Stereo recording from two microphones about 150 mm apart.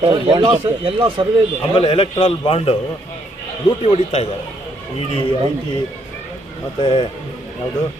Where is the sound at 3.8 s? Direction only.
40° left (ahead or behind).